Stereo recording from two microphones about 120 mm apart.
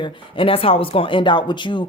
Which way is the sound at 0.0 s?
45° left (ahead or behind).